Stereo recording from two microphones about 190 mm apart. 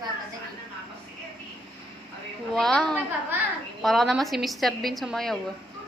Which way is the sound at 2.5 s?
5° left (ahead or behind).